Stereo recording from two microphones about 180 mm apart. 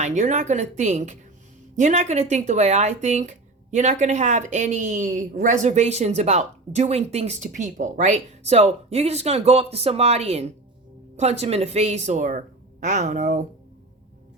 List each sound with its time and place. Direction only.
0.0 s speech: 40° right (ahead or behind)